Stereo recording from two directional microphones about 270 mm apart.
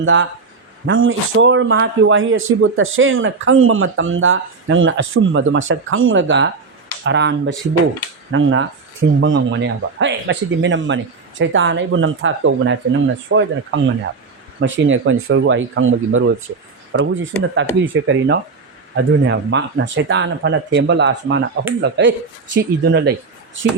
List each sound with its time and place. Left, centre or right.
0.0 s speech: right